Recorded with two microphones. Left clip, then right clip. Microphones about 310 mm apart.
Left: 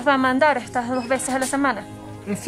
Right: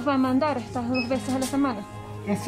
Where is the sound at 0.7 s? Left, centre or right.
Left.